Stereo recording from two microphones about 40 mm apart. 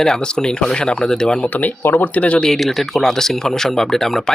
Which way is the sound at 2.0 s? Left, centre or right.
Left.